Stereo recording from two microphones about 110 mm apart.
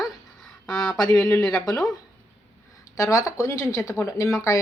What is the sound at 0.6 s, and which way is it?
Speech, 5° left (ahead or behind).